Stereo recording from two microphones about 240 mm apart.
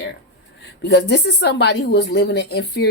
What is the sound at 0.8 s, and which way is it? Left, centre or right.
A woman's voice, left.